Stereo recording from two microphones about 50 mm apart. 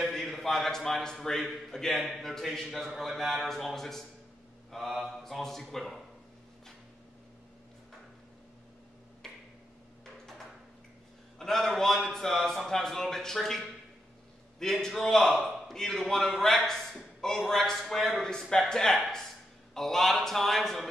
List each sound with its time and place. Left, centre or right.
0.1 s a man's voice: centre
4.6 s mantra: centre
5.0 s a man's voice: centre
10.0 s a sound: centre
11.3 s a man's voice: centre